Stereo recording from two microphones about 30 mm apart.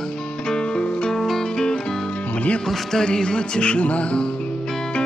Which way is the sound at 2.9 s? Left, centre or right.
Left.